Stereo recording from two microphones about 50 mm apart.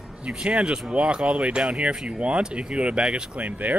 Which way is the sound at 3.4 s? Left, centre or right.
Right.